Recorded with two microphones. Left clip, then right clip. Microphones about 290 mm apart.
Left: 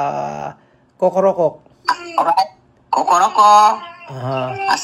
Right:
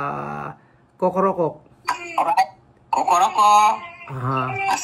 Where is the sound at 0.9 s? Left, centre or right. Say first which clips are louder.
Left 5 dB; left.